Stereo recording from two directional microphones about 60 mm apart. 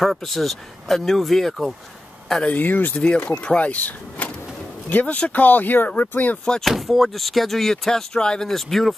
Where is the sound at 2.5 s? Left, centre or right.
Left.